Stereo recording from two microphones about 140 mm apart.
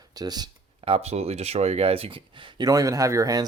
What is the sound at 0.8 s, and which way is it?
Speech, 45° right (ahead or behind).